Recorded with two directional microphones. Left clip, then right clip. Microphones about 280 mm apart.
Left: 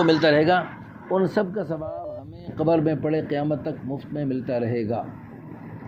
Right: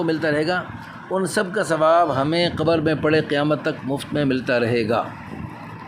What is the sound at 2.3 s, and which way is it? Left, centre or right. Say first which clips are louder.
Speech: right 4 dB; centre.